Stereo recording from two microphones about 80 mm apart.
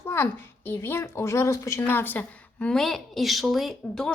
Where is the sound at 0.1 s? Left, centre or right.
Left.